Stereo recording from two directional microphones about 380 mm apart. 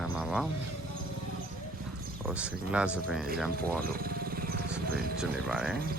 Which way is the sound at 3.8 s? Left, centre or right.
Right.